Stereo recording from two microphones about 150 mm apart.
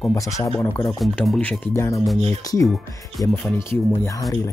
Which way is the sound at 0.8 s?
5° left (ahead or behind).